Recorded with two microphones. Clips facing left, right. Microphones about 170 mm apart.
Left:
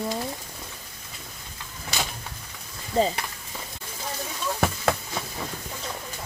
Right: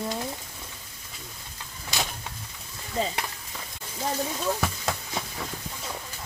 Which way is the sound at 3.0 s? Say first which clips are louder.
Left 6 dB; 35° left (ahead or behind).